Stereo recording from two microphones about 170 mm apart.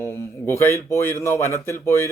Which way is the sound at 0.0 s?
15° left (ahead or behind).